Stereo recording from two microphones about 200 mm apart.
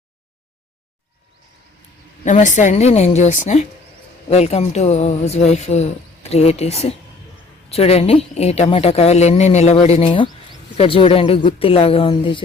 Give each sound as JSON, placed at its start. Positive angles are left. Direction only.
{"t": 2.2, "sound": "a woman's voice", "side_deg": 40}